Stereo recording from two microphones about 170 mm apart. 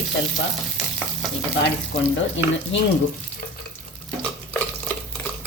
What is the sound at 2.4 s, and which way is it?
Speech, 90° left.